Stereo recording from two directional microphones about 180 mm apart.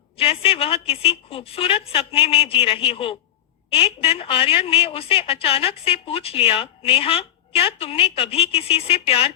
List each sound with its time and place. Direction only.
0.2 s a woman's voice: 30° left (ahead or behind)